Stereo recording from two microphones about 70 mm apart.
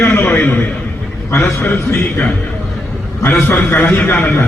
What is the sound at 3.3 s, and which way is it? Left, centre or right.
Speech, left.